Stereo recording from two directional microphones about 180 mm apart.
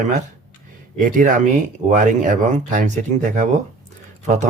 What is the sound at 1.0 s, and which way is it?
Speech, 45° right (ahead or behind).